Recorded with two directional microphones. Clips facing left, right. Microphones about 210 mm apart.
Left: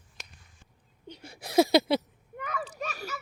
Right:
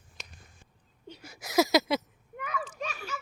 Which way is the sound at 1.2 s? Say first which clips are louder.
Left 3 dB; 30° left (ahead or behind).